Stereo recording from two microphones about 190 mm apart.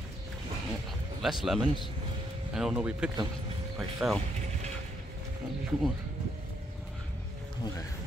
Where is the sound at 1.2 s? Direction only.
Centre (ahead or behind).